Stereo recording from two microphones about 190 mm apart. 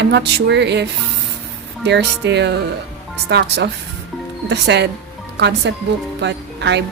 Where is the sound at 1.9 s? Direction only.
65° right (ahead or behind).